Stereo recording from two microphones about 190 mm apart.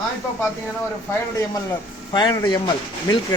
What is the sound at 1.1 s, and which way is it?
Speech, 15° left (ahead or behind).